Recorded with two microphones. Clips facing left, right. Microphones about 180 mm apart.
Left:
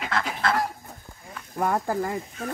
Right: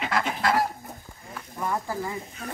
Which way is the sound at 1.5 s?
55° left (ahead or behind).